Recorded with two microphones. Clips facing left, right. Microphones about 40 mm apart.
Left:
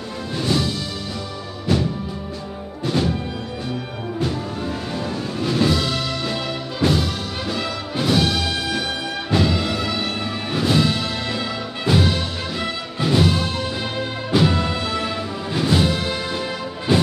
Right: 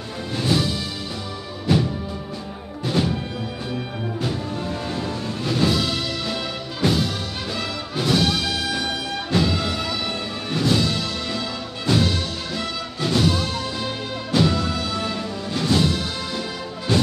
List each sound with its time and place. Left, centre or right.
0.4 s music: centre
2.9 s music: centre
4.2 s music: centre